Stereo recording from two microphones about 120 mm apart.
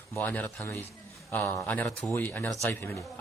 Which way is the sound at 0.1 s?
15° left (ahead or behind).